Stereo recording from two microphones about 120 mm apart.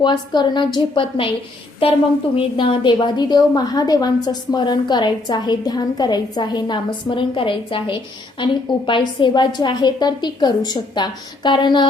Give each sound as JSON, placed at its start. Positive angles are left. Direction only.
{"t": 0.0, "sound": "a woman's voice", "side_deg": 40}